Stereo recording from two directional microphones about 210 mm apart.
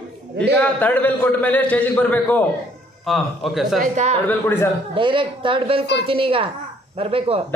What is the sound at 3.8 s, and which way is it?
Speech, 35° right (ahead or behind).